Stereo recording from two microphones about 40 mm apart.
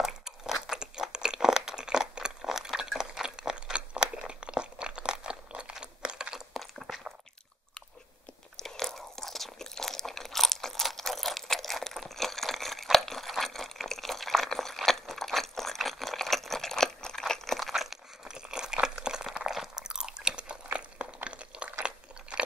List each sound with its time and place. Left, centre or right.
0.0 s chewing: centre
6.5 s a sound: centre
8.6 s crunch: centre
12.9 s a sound: centre
17.6 s crunch: centre
18.2 s crunch: centre
19.5 s chewing: centre
19.8 s chewing: centre
20.7 s a sound: right